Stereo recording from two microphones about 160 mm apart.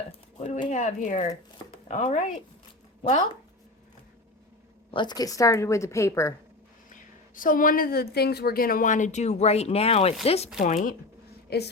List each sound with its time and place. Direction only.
0.3 s a sound: 50° left (ahead or behind)
0.7 s speech: 50° left (ahead or behind)
4.9 s a woman's voice: 30° left (ahead or behind)
6.9 s a woman's voice: 55° left (ahead or behind); by 10.5 s 40° left (ahead or behind)
10.6 s speech: 50° left (ahead or behind)
11.4 s a woman's voice: 90° left